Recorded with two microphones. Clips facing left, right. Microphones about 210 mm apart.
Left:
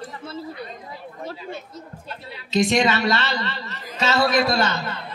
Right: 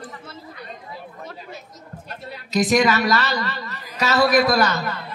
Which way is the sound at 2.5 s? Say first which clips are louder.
Right 1 dB; 25° left (ahead or behind).